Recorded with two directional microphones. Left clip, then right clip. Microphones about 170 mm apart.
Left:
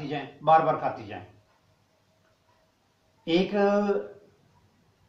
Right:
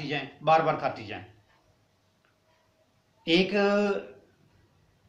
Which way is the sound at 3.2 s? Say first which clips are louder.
Even; 15° right (ahead or behind).